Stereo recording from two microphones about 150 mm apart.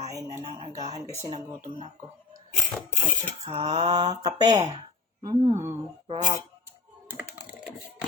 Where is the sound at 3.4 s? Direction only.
40° right (ahead or behind).